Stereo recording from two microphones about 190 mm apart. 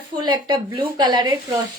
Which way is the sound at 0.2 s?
20° right (ahead or behind).